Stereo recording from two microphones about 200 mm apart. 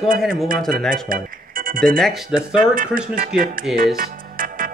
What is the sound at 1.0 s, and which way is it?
Speech, 45° right (ahead or behind).